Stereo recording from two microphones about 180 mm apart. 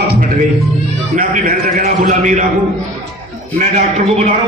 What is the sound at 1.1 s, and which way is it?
A man's voice, 55° right (ahead or behind).